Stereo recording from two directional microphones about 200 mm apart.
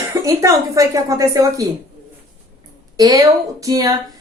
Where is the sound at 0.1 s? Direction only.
15° right (ahead or behind).